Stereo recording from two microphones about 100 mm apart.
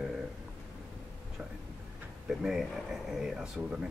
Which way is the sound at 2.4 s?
5° right (ahead or behind).